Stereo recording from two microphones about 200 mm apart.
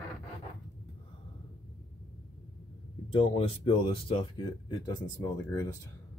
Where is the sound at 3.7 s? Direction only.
25° left (ahead or behind).